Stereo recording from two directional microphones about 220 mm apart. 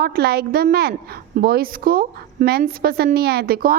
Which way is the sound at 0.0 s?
45° right (ahead or behind).